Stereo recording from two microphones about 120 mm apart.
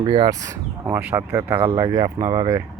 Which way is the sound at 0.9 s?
15° right (ahead or behind).